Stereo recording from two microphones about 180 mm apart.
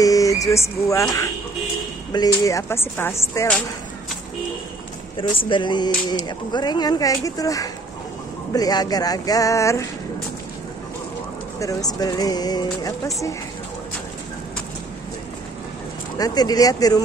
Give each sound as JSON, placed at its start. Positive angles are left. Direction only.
{"t": 0.0, "sound": "speech", "side_deg": 20}
{"t": 2.1, "sound": "speech", "side_deg": 20}
{"t": 5.1, "sound": "speech", "side_deg": 30}
{"t": 11.6, "sound": "speech", "side_deg": 20}
{"t": 16.2, "sound": "speech", "side_deg": 20}